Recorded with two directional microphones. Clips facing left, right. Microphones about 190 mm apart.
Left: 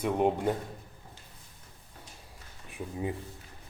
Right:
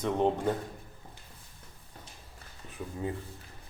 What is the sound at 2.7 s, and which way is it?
Speech, 15° left (ahead or behind).